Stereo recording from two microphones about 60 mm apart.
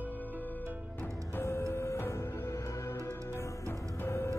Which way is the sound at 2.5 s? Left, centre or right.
Left.